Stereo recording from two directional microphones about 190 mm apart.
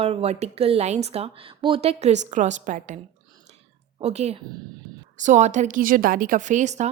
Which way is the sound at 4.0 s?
35° right (ahead or behind).